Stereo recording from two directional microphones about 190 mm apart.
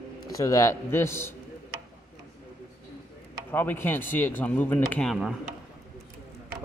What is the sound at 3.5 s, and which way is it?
Speech, 10° left (ahead or behind).